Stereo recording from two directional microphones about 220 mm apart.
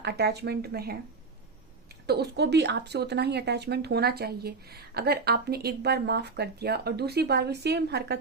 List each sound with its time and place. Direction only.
0.0 s speech: 50° right (ahead or behind)
2.0 s speech: 50° right (ahead or behind)